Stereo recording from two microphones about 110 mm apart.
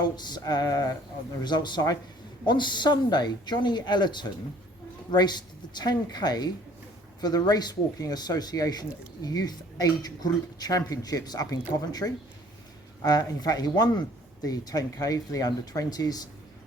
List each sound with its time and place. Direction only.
0.0 s speech: 40° left (ahead or behind)